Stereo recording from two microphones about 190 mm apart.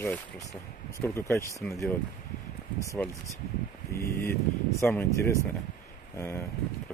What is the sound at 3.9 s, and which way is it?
Speech, 55° left (ahead or behind).